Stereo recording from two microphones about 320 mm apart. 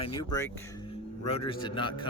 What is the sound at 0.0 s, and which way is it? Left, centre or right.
Speech, centre.